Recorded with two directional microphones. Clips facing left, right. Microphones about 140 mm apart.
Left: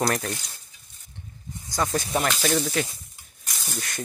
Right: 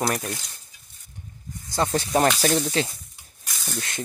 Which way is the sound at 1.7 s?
30° right (ahead or behind).